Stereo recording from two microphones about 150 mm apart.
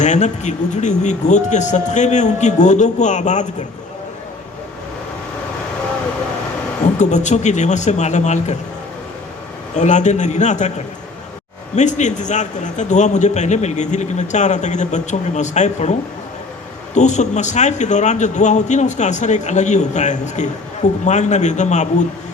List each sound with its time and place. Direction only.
0.0 s a man's voice: 50° left (ahead or behind)
6.8 s a man's voice: 50° left (ahead or behind)
9.7 s a man's voice: 50° left (ahead or behind)
11.8 s a man's voice: 50° left (ahead or behind)